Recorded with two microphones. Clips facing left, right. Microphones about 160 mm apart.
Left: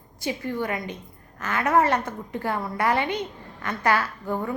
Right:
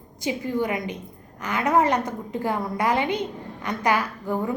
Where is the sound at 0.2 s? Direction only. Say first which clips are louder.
Right 3 dB; 15° right (ahead or behind).